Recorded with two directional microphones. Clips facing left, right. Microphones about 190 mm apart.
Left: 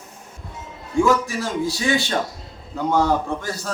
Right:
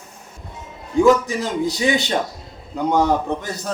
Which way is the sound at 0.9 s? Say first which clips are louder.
Right 4 dB; 20° right (ahead or behind).